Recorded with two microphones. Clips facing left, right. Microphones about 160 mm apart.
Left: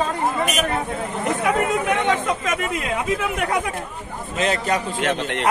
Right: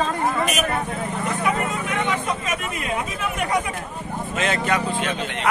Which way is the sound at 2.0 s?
90° left.